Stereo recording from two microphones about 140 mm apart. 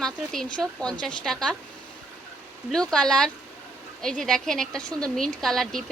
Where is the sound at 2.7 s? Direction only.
5° left (ahead or behind).